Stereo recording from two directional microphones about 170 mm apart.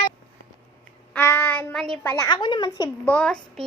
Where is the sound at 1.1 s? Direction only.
15° left (ahead or behind).